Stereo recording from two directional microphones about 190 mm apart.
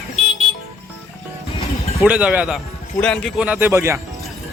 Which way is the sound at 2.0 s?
5° right (ahead or behind).